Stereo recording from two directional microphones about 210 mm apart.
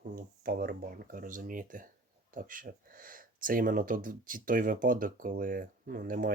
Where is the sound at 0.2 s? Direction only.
45° right (ahead or behind).